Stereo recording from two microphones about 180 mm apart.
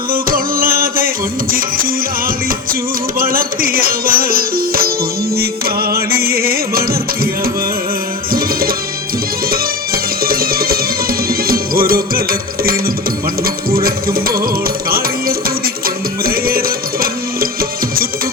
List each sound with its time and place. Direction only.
0.1 s music: 55° right (ahead or behind)